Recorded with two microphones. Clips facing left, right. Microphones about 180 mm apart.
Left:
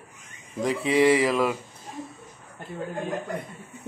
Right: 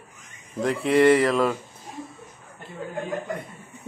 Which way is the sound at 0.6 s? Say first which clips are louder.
Right 2 dB; centre (ahead or behind).